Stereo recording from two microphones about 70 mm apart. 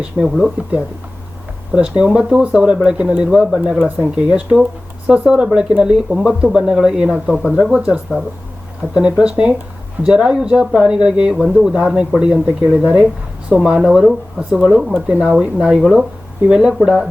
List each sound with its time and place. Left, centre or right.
0.1 s speech: right
1.7 s speech: centre
2.0 s speech: centre
3.8 s speech: right; by 14.9 s centre
14.9 s speech: centre